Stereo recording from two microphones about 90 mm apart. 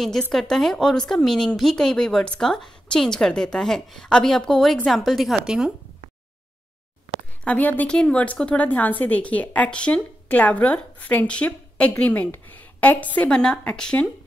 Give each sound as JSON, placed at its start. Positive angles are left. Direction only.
{"t": 0.3, "sound": "speech", "side_deg": 5}
{"t": 7.4, "sound": "a woman's voice", "side_deg": 20}